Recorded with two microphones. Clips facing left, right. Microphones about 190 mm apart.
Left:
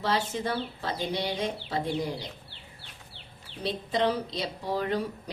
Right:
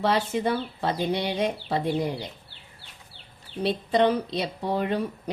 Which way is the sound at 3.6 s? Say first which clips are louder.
Right 5 dB; 60° right (ahead or behind).